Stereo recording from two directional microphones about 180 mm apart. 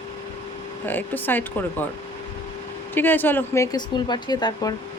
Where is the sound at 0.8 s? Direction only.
10° left (ahead or behind).